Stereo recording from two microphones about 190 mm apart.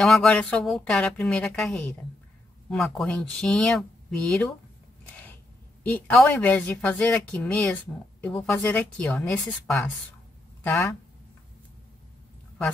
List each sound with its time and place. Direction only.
0.0 s speech: 5° left (ahead or behind)
5.1 s a sound: 10° left (ahead or behind)
5.9 s a woman's voice: 10° left (ahead or behind)